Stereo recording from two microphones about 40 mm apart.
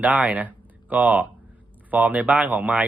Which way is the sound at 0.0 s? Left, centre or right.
Right.